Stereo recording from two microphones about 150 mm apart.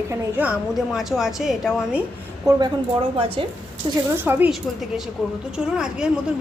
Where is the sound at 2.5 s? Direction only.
20° right (ahead or behind).